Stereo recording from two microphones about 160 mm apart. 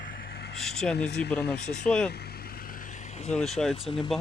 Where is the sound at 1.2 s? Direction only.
90° left.